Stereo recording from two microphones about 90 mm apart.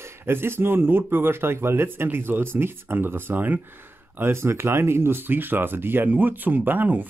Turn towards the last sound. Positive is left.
turn(degrees=-20)  # may be behind; listen again after turning